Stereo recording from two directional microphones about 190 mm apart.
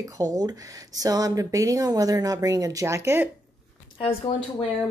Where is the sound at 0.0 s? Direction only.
20° right (ahead or behind).